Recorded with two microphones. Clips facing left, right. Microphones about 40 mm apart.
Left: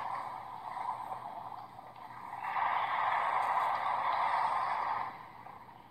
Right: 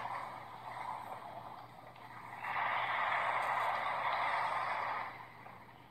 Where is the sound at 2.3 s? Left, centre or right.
Right.